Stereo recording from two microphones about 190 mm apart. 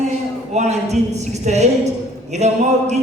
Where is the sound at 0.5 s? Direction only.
35° right (ahead or behind).